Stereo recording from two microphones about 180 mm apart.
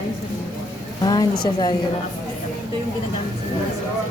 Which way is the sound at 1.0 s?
20° left (ahead or behind).